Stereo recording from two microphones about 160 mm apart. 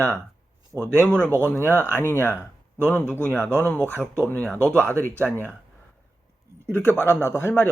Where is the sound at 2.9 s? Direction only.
10° left (ahead or behind).